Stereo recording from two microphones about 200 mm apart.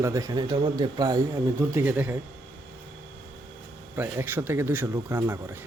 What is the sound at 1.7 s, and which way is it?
Speech, 10° right (ahead or behind).